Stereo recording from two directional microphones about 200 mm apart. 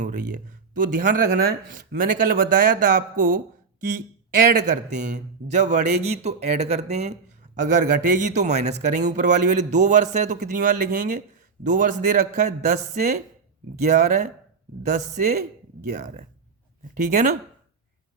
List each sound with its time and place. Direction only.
0.0 s speech: 40° right (ahead or behind)
4.6 s speech: 40° right (ahead or behind)